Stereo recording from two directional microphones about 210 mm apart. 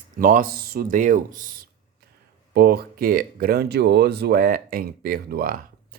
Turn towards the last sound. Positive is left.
turn(degrees=-45)  # may be behind; listen again after turning